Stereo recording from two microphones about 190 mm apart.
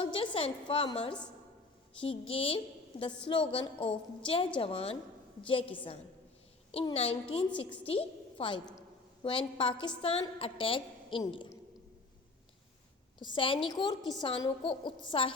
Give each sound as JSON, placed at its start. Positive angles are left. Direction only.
{"t": 0.0, "sound": "a woman's voice", "side_deg": 30}
{"t": 13.1, "sound": "a woman's voice", "side_deg": 25}